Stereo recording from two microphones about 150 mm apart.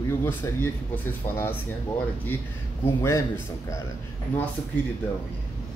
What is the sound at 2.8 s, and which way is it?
Speech, 15° left (ahead or behind).